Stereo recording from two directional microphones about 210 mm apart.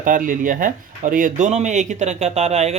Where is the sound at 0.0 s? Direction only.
40° right (ahead or behind).